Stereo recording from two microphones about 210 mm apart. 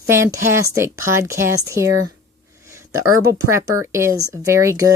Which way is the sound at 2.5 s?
15° right (ahead or behind).